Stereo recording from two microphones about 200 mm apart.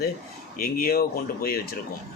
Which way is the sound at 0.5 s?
45° left (ahead or behind).